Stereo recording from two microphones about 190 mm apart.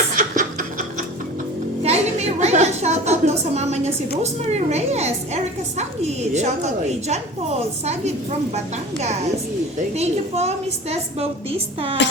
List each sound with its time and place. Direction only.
0.2 s music: 45° right (ahead or behind)
1.8 s a woman's voice: 35° right (ahead or behind)